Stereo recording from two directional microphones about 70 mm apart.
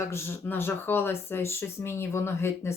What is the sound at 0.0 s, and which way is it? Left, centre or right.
Speech, left.